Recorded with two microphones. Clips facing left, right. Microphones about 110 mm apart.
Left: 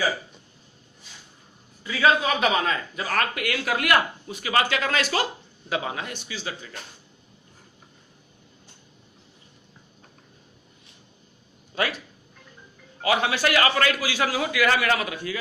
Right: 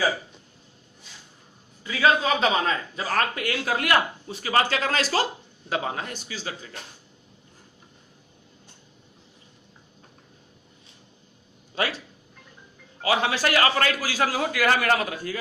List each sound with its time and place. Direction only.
1.8 s a man's voice: 20° right (ahead or behind); by 6.7 s 40° right (ahead or behind)
11.7 s a sound: 35° right (ahead or behind)
13.1 s a man's voice: 35° right (ahead or behind)